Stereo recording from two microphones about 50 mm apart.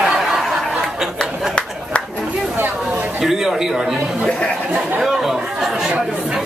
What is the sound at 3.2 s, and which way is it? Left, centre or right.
Speech, centre.